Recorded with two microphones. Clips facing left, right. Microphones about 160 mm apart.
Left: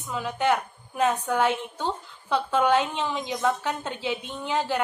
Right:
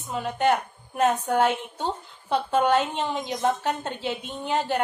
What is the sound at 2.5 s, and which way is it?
A woman's voice, 50° right (ahead or behind).